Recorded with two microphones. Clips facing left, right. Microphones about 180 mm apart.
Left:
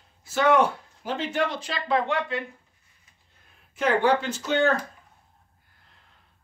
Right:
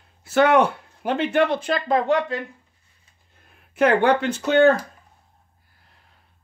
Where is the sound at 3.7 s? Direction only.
65° right (ahead or behind).